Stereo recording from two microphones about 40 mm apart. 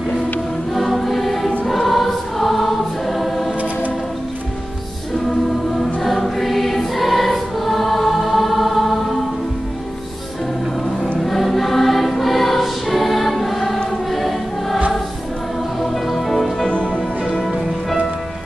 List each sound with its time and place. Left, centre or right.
0.7 s choir: centre
5.9 s choir: centre
11.1 s choir: centre
15.8 s music: centre
16.7 s music: left
17.4 s music: centre